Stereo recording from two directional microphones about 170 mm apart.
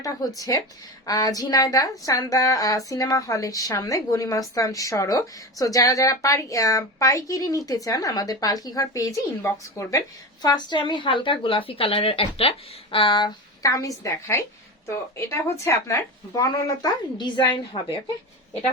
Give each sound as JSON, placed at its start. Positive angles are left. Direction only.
{"t": 0.3, "sound": "speech", "side_deg": 20}